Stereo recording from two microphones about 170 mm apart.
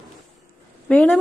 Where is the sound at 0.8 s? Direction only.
5° left (ahead or behind).